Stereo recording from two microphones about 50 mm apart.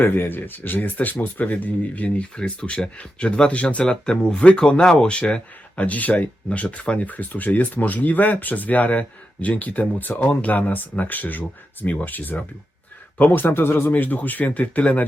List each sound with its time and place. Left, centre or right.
0.0 s speech: left